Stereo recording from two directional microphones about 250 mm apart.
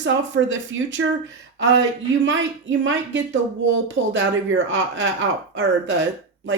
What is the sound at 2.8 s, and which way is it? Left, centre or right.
A woman's voice, right.